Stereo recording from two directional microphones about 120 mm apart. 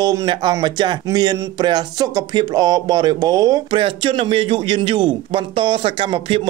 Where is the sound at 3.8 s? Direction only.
45° right (ahead or behind).